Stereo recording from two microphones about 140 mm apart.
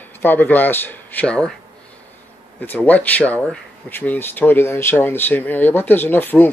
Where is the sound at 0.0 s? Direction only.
15° left (ahead or behind).